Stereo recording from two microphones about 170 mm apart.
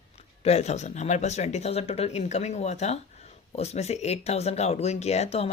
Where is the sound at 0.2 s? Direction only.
40° left (ahead or behind).